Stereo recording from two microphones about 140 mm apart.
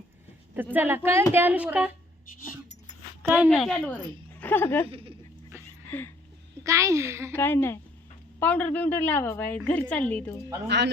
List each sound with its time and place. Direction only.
0.5 s a woman's voice: 15° right (ahead or behind)
3.2 s a woman's voice: 15° right (ahead or behind)
3.5 s a woman's voice: 5° left (ahead or behind)
4.9 s speech: 40° right (ahead or behind)
6.7 s a child's voice: 20° right (ahead or behind)
7.3 s a woman's voice: 15° left (ahead or behind)